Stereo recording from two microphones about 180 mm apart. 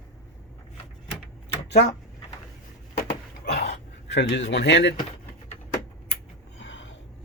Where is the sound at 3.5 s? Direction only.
75° left (ahead or behind).